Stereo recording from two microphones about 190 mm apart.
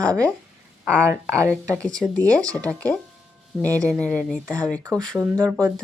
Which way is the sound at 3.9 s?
5° left (ahead or behind).